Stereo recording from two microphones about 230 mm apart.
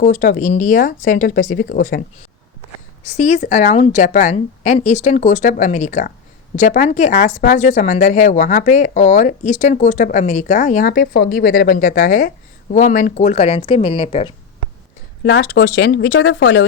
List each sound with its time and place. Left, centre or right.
0.0 s speech: left
10.9 s speech: left
15.2 s speech: left